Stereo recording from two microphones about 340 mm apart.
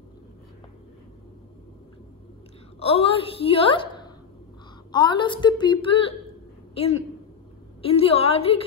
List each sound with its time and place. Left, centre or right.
2.8 s a woman's voice: centre